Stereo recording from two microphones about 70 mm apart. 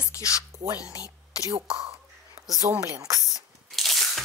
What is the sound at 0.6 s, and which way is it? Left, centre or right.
Speech, right.